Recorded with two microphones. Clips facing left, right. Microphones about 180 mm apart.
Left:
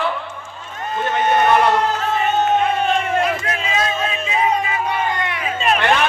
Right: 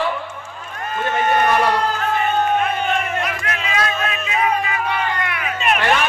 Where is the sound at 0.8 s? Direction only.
20° left (ahead or behind).